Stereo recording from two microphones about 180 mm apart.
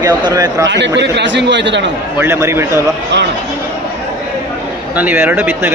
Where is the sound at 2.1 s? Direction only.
15° right (ahead or behind).